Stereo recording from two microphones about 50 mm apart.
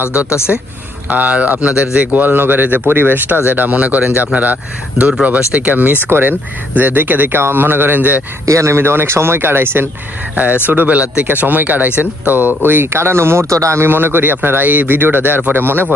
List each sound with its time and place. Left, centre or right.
0.3 s speech: left
1.1 s speech: right
2.0 s speech: right
5.2 s speech: right
6.1 s speech: right
8.4 s speech: right
8.8 s speech: right
10.3 s speech: right
13.8 s speech: right